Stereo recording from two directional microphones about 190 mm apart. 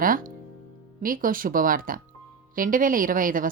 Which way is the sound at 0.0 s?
45° right (ahead or behind).